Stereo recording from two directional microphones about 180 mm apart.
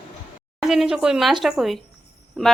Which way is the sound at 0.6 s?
Centre (ahead or behind).